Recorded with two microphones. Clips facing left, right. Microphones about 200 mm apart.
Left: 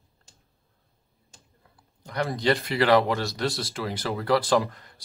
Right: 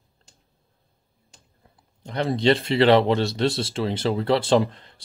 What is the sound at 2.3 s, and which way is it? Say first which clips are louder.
Speech: right 6 dB; 25° right (ahead or behind).